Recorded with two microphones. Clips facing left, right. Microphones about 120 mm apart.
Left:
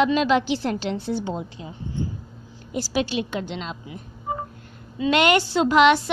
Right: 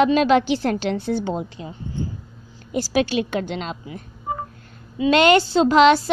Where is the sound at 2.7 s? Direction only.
55° right (ahead or behind).